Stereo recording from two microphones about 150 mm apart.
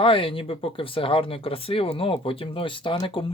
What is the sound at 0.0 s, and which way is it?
Speech, 35° left (ahead or behind).